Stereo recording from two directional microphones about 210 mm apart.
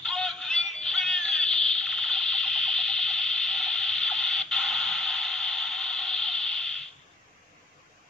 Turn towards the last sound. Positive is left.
turn(degrees=5)  # may be behind; listen again after turning